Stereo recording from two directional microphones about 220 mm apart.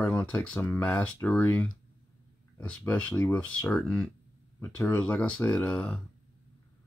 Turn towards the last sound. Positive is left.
turn(degrees=5)  # may be behind; listen again after turning